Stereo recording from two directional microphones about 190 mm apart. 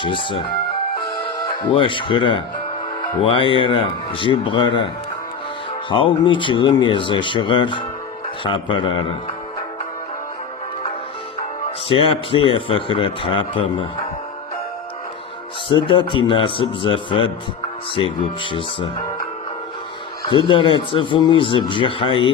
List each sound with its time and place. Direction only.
0.0 s a man's voice: 25° left (ahead or behind)
5.9 s a man's voice: 25° left (ahead or behind)
11.9 s a man's voice: 30° left (ahead or behind)
15.7 s a man's voice: 25° left (ahead or behind)
20.3 s a man's voice: 25° left (ahead or behind)